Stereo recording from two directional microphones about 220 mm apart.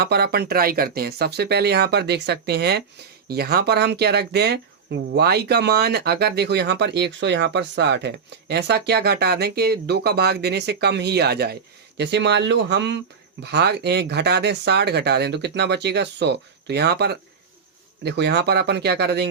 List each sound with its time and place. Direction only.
0.0 s speech: 45° right (ahead or behind)